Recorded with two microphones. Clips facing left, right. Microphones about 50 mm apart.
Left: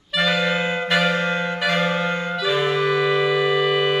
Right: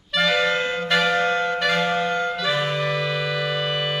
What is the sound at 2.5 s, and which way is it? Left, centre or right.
Music, centre.